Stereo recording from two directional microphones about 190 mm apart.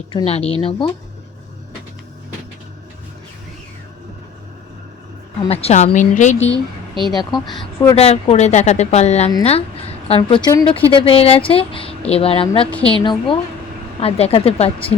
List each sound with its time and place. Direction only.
0.1 s speech: 30° left (ahead or behind)
5.4 s speech: 30° left (ahead or behind)
7.1 s speech: 20° left (ahead or behind)
7.9 s a woman's voice: 30° left (ahead or behind)